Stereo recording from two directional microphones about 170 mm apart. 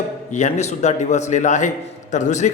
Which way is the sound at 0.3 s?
40° left (ahead or behind).